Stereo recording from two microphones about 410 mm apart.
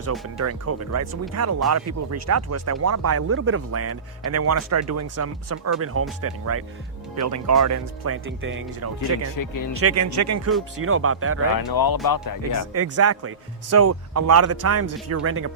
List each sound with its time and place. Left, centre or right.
0.3 s speech: right
11.5 s speech: left
12.7 s speech: right